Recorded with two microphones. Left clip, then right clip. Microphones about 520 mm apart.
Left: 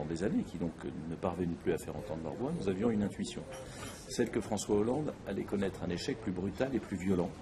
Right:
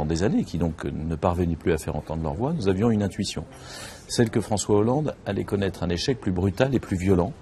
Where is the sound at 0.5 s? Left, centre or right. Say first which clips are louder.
Right 11 dB; right.